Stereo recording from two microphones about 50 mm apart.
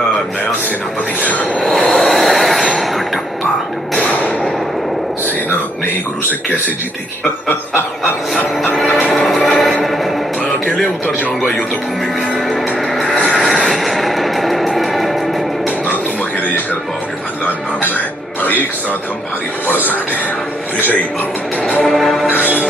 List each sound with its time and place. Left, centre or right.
1.2 s train: left
1.6 s a sound: centre
4.0 s whip: left
9.1 s music: centre
12.4 s music: centre
17.8 s music: left
21.8 s music: centre